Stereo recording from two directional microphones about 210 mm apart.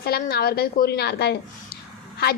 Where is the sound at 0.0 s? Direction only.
45° left (ahead or behind).